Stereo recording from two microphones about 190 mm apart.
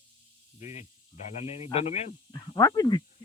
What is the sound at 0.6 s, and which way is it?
Speech, 40° left (ahead or behind).